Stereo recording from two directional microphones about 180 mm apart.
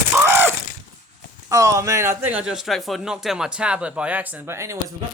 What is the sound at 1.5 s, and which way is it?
Speech, 20° right (ahead or behind).